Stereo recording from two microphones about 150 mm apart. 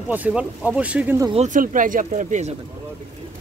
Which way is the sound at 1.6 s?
60° right (ahead or behind).